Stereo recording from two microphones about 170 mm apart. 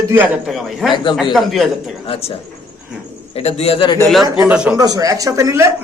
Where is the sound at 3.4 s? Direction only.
35° left (ahead or behind).